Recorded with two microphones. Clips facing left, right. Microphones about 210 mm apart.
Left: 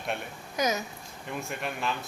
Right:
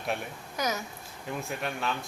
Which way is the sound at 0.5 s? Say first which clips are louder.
Left 3 dB; 20° left (ahead or behind).